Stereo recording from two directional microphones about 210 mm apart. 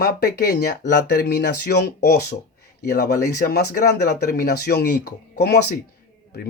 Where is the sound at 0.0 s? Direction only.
50° left (ahead or behind).